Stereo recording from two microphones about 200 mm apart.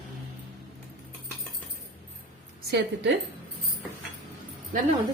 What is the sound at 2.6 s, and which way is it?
Speech, 60° right (ahead or behind).